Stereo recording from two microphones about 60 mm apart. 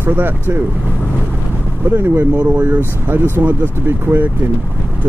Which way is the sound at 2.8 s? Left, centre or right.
Right.